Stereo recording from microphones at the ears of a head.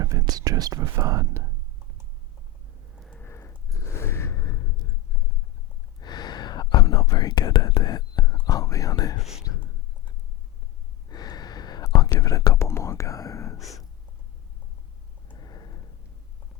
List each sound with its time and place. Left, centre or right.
0.0 s speech: right
3.2 s gasp: left
6.0 s whispering: left
11.1 s whispering: left
15.3 s a sound: left